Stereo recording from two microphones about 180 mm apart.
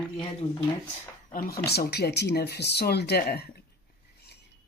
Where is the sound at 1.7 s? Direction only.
65° left (ahead or behind).